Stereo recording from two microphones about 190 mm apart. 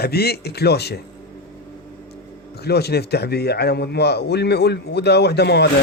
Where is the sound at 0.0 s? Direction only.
55° left (ahead or behind).